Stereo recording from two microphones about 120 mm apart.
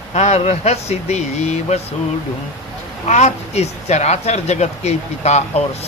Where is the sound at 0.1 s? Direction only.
65° left (ahead or behind).